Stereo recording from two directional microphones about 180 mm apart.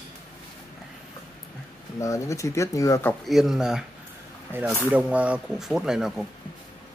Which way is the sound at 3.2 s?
Centre (ahead or behind).